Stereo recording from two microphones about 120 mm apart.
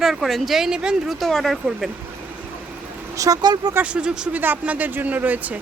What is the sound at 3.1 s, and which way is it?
Speech, 30° right (ahead or behind).